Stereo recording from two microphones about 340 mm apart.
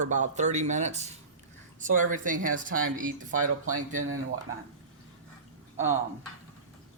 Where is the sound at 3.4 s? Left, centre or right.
Right.